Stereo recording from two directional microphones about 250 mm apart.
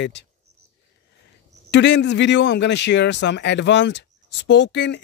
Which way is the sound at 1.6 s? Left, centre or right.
Left.